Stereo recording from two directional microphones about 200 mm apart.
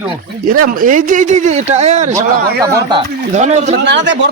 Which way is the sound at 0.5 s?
45° right (ahead or behind).